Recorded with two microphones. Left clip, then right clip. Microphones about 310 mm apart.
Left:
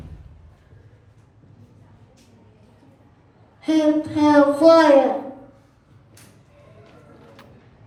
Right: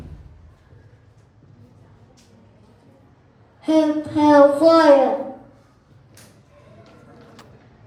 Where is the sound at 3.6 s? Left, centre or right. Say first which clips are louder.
Right 1 dB; centre.